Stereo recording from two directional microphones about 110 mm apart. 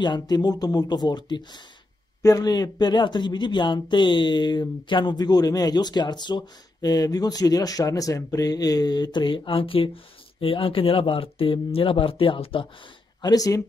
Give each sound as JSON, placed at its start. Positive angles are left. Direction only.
{"t": 0.0, "sound": "speech", "side_deg": 40}
{"t": 13.2, "sound": "speech", "side_deg": 35}